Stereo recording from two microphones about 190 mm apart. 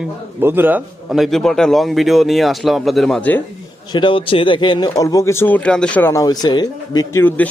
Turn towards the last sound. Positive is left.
turn(degrees=20)  # may be behind; listen again after turning